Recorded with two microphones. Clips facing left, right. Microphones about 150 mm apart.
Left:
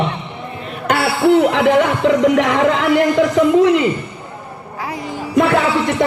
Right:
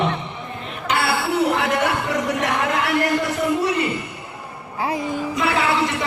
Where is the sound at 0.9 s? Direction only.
60° left (ahead or behind); by 3.8 s 90° left.